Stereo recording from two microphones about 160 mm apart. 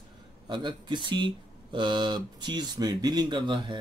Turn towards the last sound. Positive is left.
turn(degrees=-30)  # may be behind; listen again after turning